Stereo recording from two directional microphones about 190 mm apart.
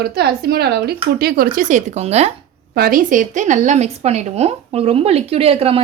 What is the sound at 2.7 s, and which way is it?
A woman's voice, 50° right (ahead or behind).